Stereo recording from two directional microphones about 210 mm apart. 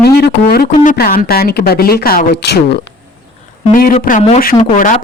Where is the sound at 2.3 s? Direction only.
55° left (ahead or behind).